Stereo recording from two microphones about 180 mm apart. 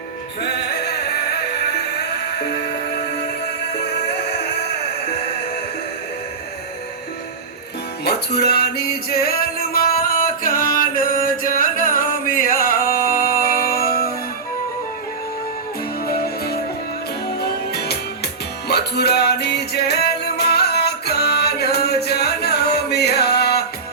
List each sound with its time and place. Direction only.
8.0 s music: 65° left (ahead or behind)
16.0 s music: 60° left (ahead or behind)